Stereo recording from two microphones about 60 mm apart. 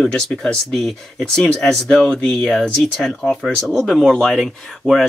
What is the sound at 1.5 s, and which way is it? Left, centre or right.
Speech, centre.